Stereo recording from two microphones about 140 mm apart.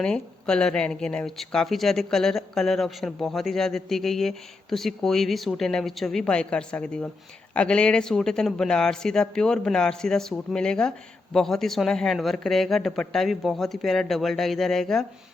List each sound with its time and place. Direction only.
0.0 s speech: 5° left (ahead or behind)